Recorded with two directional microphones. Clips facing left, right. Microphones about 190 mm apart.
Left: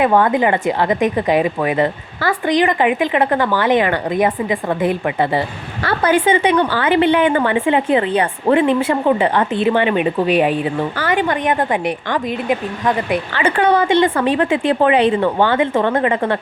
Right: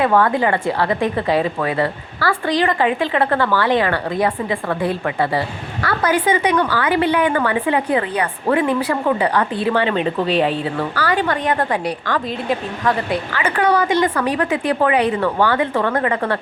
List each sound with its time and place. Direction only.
0.0 s a woman's voice: 20° left (ahead or behind)
5.8 s a woman's voice: 25° left (ahead or behind)